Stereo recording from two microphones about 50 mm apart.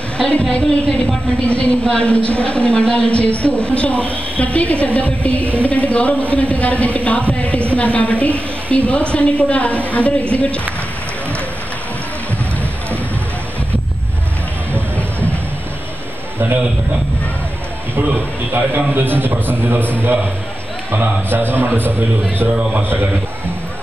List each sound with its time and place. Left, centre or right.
0.2 s a woman's voice: centre
14.7 s music: left
18.0 s a man's voice: right
20.9 s a man's voice: right